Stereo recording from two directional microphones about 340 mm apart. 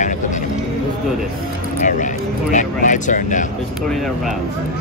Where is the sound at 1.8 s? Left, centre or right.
Left.